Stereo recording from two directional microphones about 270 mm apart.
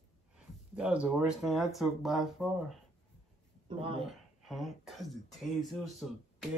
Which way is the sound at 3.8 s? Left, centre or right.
Centre.